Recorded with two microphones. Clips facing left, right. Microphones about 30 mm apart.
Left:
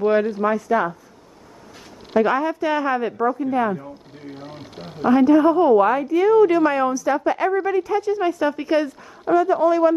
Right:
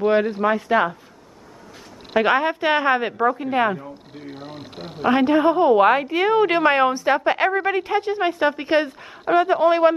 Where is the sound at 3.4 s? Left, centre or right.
Right.